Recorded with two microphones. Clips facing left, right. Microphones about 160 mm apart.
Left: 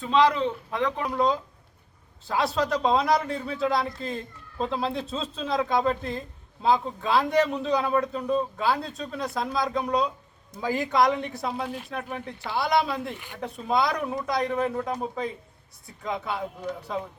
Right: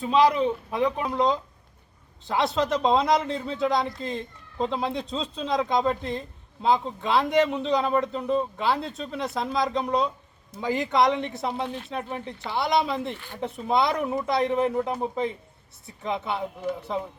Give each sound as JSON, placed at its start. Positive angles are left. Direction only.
{"t": 0.0, "sound": "speech", "side_deg": -15}